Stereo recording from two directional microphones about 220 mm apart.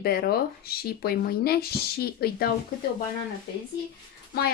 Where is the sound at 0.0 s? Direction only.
45° left (ahead or behind).